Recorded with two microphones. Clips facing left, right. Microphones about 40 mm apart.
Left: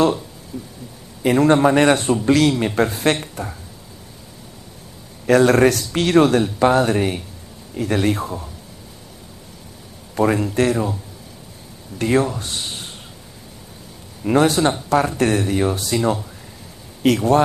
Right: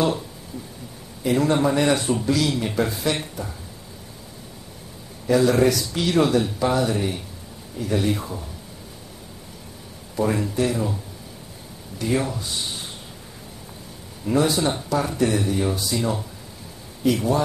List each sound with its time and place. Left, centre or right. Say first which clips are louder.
1.2 s speech: left 6 dB; left
5.2 s speech: left 4 dB; left
10.1 s speech: left 5 dB; left
12.0 s speech: left 6 dB; left
14.2 s speech: left 5 dB; left
17.0 s speech: left 5 dB; left